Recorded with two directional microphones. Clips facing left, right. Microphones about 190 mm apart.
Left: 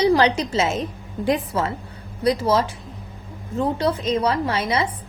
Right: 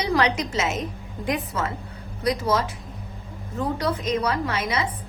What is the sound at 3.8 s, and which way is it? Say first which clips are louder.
A woman's voice: left 3 dB; 30° left (ahead or behind).